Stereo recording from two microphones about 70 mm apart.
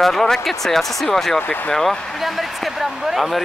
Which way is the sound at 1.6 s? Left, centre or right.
Centre.